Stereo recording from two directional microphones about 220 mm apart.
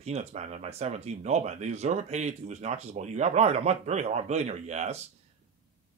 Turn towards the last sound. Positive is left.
turn(degrees=-30)  # may be behind; listen again after turning